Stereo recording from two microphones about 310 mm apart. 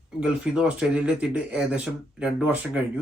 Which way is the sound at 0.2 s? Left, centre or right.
Centre.